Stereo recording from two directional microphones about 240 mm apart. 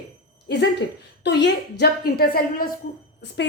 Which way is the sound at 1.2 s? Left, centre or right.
Left.